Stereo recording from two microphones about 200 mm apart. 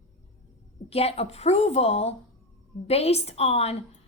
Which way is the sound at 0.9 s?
30° left (ahead or behind).